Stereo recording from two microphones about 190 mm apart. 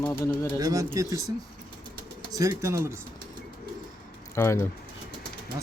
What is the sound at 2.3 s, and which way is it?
Speech, 15° right (ahead or behind).